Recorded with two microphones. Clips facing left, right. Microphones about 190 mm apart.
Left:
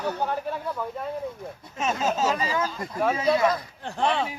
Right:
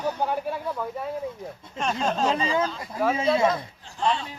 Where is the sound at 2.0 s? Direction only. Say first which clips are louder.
Right 1 dB; 5° left (ahead or behind).